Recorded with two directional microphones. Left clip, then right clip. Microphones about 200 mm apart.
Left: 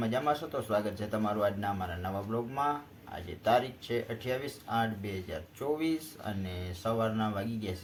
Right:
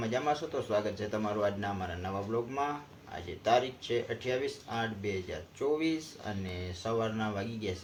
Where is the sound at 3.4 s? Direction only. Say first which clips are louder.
Even; 5° left (ahead or behind).